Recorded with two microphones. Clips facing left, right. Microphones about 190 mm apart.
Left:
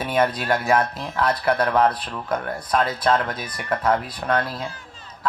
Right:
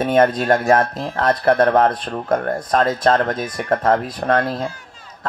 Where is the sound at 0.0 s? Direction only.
50° right (ahead or behind).